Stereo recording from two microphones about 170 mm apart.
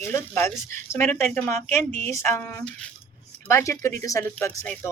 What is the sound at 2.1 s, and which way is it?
Speech, 15° left (ahead or behind).